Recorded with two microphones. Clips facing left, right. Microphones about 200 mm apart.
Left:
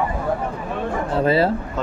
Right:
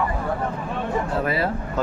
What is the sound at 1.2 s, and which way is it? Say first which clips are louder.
Speech: left 6 dB; 30° left (ahead or behind).